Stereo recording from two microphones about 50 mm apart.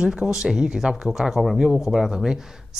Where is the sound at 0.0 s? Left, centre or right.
Centre.